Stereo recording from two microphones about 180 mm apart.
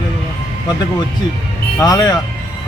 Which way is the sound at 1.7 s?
20° left (ahead or behind).